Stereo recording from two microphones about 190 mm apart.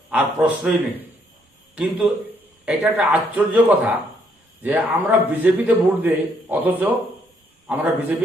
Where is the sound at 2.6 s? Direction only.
10° right (ahead or behind).